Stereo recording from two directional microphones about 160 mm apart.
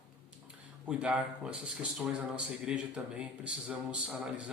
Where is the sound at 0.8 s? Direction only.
5° right (ahead or behind).